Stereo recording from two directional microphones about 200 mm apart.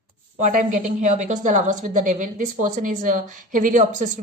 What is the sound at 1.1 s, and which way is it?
A woman's voice, 35° right (ahead or behind).